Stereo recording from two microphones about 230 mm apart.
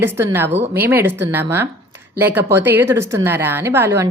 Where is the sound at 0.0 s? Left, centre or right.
Centre.